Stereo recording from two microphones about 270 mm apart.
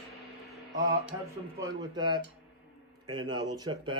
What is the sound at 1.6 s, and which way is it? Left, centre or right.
Speech, centre.